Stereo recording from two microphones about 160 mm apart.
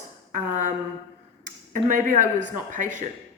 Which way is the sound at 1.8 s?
55° right (ahead or behind).